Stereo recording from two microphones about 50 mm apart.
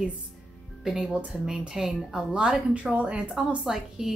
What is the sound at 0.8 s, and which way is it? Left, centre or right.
Speech, centre.